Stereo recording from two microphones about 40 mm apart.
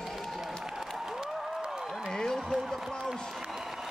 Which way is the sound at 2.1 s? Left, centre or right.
Centre.